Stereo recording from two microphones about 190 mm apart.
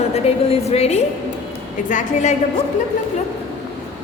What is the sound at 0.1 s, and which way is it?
A woman's voice, 35° left (ahead or behind).